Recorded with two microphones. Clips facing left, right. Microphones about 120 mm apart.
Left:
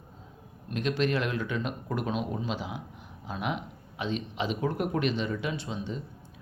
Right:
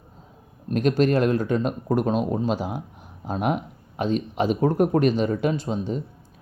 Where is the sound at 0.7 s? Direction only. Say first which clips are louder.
Right 8 dB; 45° right (ahead or behind).